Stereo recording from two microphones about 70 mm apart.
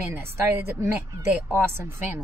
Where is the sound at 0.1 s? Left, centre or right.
Right.